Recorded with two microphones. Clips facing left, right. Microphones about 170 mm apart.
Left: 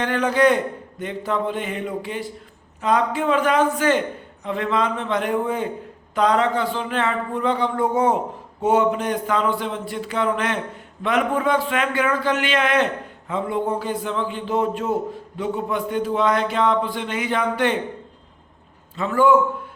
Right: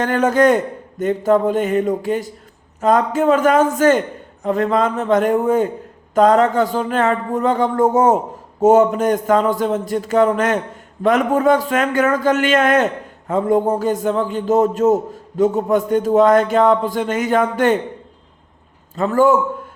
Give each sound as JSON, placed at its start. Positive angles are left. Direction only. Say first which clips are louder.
{"t": 0.0, "sound": "a man's voice", "louder": "right 4 dB", "side_deg": -45}
{"t": 18.9, "sound": "a man's voice", "louder": "right 3 dB", "side_deg": -45}